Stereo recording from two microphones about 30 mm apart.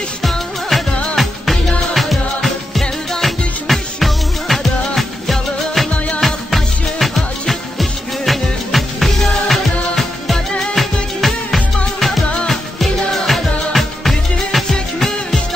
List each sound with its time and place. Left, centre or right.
0.2 s music: centre